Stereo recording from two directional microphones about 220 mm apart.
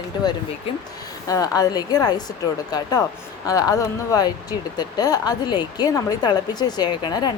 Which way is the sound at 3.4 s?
15° left (ahead or behind).